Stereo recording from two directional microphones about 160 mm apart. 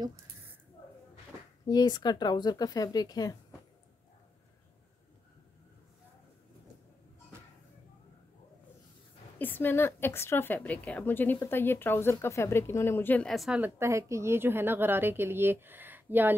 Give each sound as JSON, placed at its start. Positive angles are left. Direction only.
{"t": 1.7, "sound": "speech", "side_deg": 25}
{"t": 9.4, "sound": "a woman's voice", "side_deg": 10}